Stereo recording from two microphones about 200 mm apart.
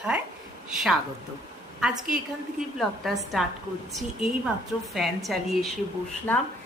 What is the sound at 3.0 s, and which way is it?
Speech, centre (ahead or behind).